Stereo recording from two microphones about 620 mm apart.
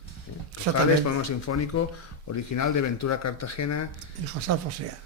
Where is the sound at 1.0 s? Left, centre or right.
Left.